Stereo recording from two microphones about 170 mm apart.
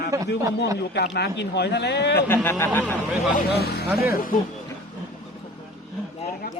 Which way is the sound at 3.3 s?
70° left (ahead or behind).